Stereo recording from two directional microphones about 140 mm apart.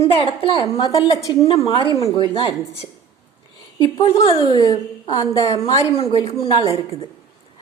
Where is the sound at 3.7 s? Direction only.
35° left (ahead or behind).